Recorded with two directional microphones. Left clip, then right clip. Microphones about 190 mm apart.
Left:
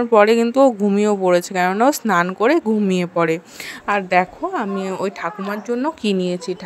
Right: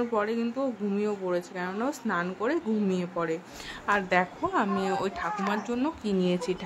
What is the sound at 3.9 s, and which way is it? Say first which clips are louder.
A woman's voice: left 8 dB; 30° left (ahead or behind).